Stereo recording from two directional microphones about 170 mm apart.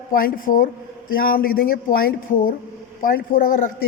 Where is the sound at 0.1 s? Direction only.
55° left (ahead or behind).